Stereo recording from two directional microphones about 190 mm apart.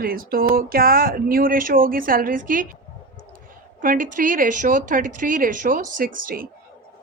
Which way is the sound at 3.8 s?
45° right (ahead or behind).